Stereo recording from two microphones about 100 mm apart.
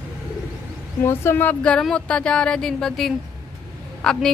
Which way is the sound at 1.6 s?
10° left (ahead or behind).